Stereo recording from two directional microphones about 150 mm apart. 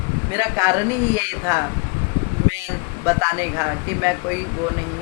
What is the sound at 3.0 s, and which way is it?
A woman's voice, 20° right (ahead or behind).